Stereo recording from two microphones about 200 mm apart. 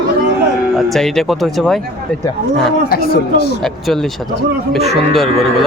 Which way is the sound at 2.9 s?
50° left (ahead or behind).